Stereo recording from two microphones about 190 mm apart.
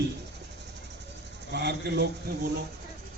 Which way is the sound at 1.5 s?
60° right (ahead or behind).